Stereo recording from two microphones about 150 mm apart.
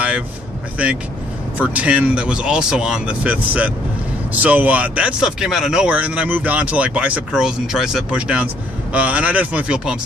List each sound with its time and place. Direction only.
0.8 s speech: 10° right (ahead or behind)